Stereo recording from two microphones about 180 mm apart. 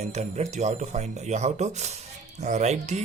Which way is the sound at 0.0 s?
40° right (ahead or behind).